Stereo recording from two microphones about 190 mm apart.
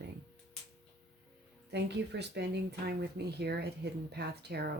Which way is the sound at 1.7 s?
65° right (ahead or behind).